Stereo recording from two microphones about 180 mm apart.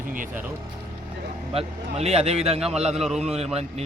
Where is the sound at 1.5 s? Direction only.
35° right (ahead or behind).